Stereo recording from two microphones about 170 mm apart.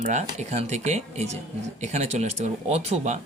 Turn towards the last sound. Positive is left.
turn(degrees=-40)  # may be behind; listen again after turning